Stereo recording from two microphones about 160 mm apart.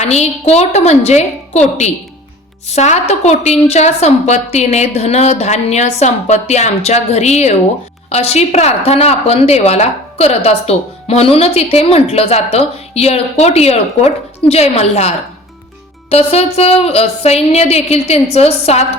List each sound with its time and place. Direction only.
0.0 s a woman's voice: 45° left (ahead or behind)